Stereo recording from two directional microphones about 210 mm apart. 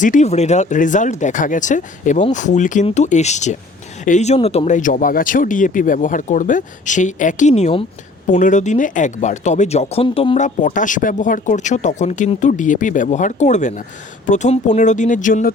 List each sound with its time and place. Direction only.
0.0 s speech: 35° left (ahead or behind)